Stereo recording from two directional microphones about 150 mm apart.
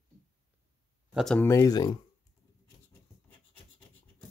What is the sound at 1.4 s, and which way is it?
Speech, 20° left (ahead or behind).